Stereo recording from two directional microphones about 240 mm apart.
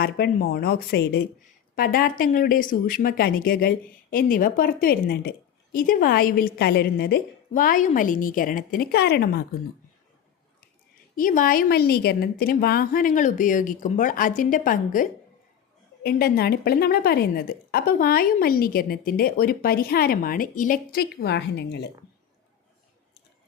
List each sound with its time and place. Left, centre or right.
0.0 s a woman's voice: left
11.1 s a woman's voice: left
16.0 s a woman's voice: left